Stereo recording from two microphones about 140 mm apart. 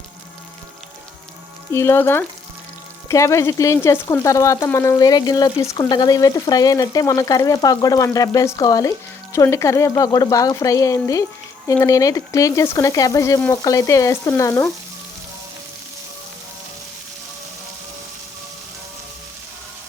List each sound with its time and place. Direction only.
1.7 s speech: 20° left (ahead or behind)